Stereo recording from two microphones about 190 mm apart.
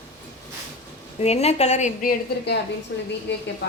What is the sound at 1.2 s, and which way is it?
Speech, 35° left (ahead or behind).